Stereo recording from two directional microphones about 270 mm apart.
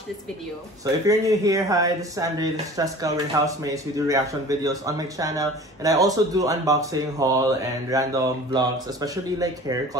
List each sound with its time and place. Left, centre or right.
1.0 s speech: centre